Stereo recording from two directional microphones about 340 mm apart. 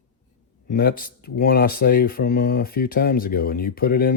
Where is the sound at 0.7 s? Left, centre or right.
Left.